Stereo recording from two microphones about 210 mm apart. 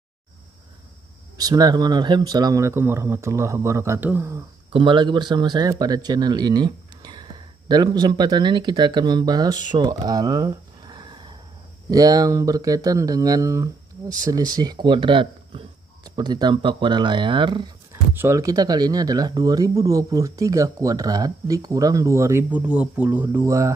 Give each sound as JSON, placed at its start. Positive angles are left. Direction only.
{"t": 1.4, "sound": "speech", "side_deg": -20}
{"t": 4.7, "sound": "speech", "side_deg": -25}
{"t": 9.7, "sound": "a sound", "side_deg": -20}
{"t": 11.9, "sound": "speech", "side_deg": -15}
{"t": 18.1, "sound": "speech", "side_deg": -10}